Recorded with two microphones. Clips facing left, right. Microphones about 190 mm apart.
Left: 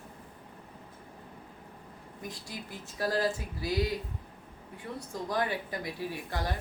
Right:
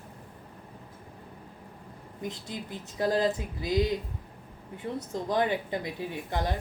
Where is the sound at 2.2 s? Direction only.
20° right (ahead or behind).